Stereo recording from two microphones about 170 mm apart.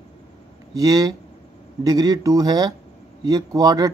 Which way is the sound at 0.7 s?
20° right (ahead or behind).